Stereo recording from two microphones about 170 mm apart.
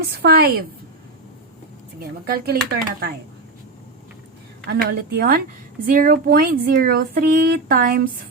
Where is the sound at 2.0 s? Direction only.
60° right (ahead or behind).